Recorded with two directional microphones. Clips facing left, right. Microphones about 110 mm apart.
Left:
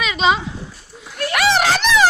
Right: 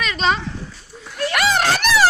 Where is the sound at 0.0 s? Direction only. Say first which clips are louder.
Left 3 dB; 5° left (ahead or behind).